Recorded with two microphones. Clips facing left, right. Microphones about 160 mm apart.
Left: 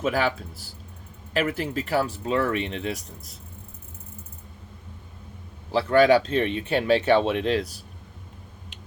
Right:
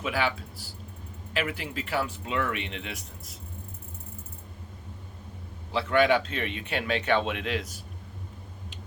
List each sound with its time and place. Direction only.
0.0 s speech: 40° left (ahead or behind)
5.7 s speech: 35° left (ahead or behind)